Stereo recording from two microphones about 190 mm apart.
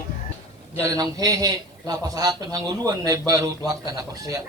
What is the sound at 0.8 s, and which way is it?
A man's voice, 20° right (ahead or behind).